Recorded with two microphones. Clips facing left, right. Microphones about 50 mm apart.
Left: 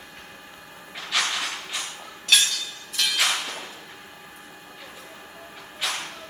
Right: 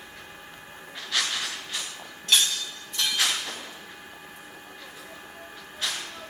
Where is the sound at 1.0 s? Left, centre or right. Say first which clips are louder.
Left 3 dB; left.